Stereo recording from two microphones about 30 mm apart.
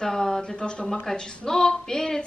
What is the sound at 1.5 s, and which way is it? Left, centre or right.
Speech, left.